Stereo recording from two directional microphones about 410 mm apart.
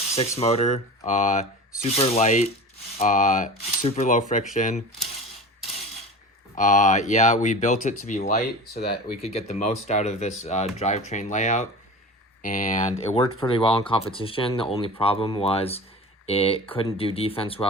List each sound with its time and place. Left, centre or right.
0.2 s speech: centre
6.6 s speech: centre